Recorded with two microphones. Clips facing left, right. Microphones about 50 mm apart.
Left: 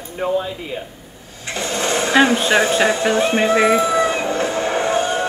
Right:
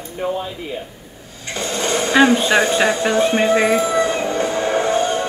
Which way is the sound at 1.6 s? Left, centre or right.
Centre.